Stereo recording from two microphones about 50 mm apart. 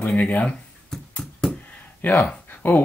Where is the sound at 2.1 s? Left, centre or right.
Centre.